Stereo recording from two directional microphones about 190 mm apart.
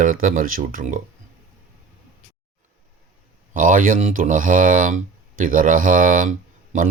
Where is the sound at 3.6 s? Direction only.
45° right (ahead or behind).